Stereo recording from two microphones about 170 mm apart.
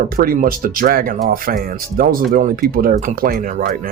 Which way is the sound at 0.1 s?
55° right (ahead or behind).